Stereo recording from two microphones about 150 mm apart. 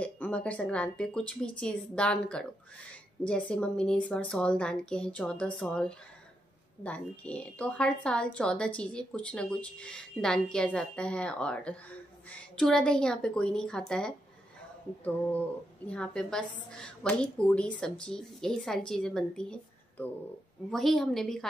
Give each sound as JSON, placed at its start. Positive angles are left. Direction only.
{"t": 0.0, "sound": "a woman's voice", "side_deg": 10}
{"t": 15.9, "sound": "a woman's voice", "side_deg": 5}